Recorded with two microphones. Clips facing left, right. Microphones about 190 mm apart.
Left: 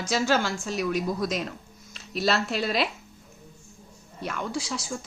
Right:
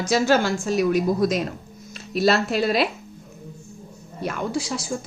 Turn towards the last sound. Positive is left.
turn(degrees=-40)  # may be behind; listen again after turning